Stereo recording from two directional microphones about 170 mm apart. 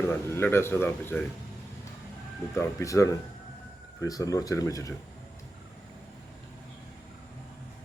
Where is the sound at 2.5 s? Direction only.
15° left (ahead or behind).